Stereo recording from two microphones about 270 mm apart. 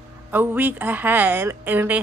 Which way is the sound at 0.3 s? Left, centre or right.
Centre.